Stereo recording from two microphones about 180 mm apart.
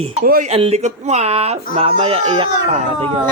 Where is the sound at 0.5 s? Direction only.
35° right (ahead or behind).